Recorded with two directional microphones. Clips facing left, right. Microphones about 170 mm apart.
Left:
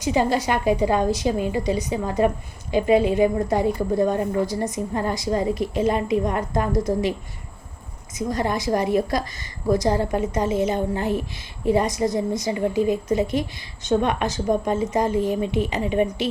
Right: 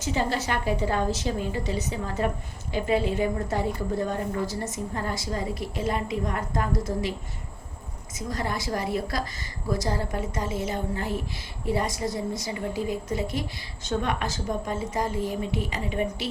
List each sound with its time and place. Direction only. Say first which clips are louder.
0.0 s a woman's voice: left 6 dB; 15° left (ahead or behind)
8.3 s a woman's voice: left 7 dB; 20° left (ahead or behind)